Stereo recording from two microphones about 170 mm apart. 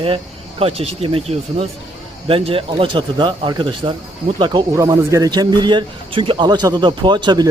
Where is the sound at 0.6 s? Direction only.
35° right (ahead or behind).